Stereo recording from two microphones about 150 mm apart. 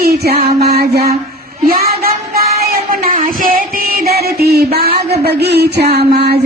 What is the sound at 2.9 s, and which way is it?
Music, 75° right (ahead or behind).